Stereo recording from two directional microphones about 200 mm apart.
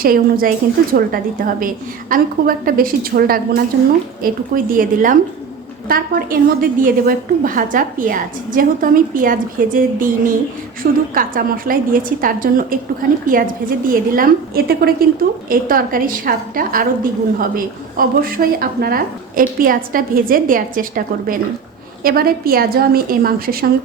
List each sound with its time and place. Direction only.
0.0 s a woman's voice: 45° right (ahead or behind)